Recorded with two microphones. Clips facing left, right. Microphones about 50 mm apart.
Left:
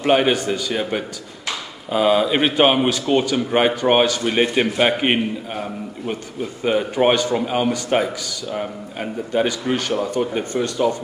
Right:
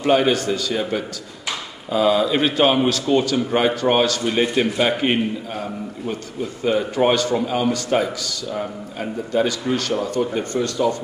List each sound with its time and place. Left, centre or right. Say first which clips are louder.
0.0 s a man's voice: even; left
6.6 s a man's voice: left 1 dB; left